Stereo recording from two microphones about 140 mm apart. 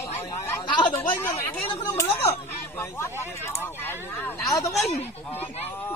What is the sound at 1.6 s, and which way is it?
Speech, 45° left (ahead or behind).